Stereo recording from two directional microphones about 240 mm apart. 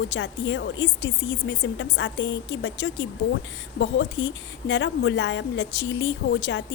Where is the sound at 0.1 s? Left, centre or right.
Left.